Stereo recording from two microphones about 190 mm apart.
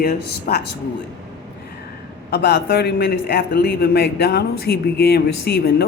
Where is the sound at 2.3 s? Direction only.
55° left (ahead or behind).